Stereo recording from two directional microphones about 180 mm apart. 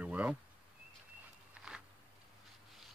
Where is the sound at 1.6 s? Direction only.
5° right (ahead or behind).